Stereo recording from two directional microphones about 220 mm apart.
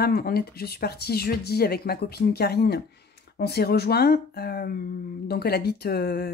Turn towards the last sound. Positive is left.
turn(degrees=45)  # may be behind; listen again after turning